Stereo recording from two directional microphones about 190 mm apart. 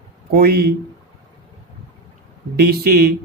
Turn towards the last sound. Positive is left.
turn(degrees=-55)  # may be behind; listen again after turning